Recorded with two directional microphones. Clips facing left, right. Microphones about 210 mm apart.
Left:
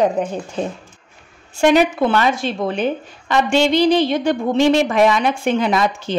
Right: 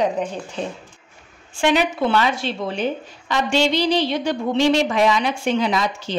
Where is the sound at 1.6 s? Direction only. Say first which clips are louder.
Left 5 dB; 45° left (ahead or behind).